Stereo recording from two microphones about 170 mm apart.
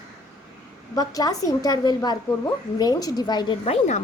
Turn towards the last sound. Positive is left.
turn(degrees=35)  # may be behind; listen again after turning